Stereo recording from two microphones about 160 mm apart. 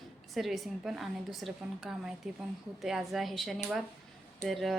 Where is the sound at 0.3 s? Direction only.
Centre (ahead or behind).